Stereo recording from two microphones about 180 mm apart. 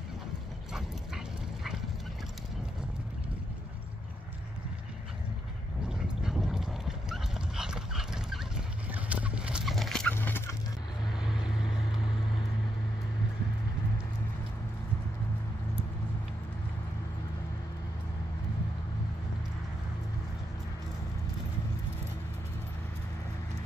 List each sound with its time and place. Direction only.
0.7 s dog: centre (ahead or behind)
5.9 s dog: 5° right (ahead or behind); by 10.5 s 10° left (ahead or behind)
11.1 s vehicle: 5° right (ahead or behind)